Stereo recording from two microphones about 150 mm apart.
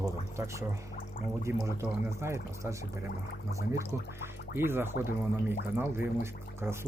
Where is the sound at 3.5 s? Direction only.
20° right (ahead or behind).